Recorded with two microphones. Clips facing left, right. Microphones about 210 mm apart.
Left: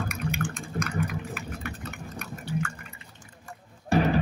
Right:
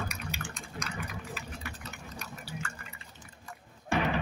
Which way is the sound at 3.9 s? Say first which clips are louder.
Left 6 dB; 40° left (ahead or behind).